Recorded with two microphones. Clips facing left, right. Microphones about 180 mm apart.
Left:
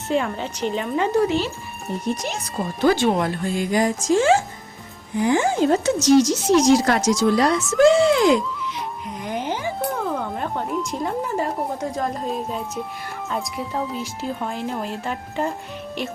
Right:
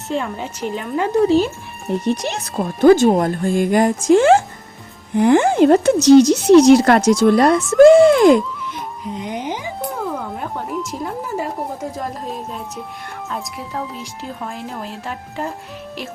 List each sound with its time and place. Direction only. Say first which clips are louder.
0.1 s speech: left 1 dB; centre (ahead or behind)
2.0 s speech: right 2 dB; 70° right (ahead or behind)
2.9 s speech: right 7 dB; 45° right (ahead or behind)
9.1 s speech: right 1 dB; 20° right (ahead or behind)
9.9 s speech: even; centre (ahead or behind)